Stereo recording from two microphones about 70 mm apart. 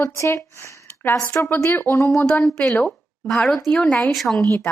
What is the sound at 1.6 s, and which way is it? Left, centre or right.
Speech, left.